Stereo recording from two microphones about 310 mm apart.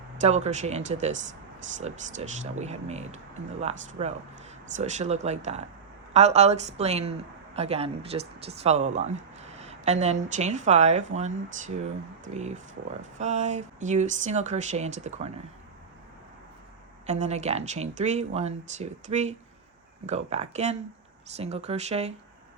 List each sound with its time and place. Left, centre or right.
0.2 s speech: right
17.1 s speech: right